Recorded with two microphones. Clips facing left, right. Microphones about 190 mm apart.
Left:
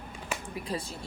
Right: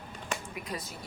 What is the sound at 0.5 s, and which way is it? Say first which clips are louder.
Speech: left 4 dB; 30° left (ahead or behind).